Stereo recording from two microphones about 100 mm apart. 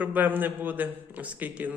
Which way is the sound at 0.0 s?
15° right (ahead or behind).